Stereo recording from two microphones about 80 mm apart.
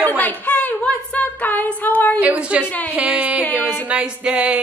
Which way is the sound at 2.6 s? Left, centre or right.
Centre.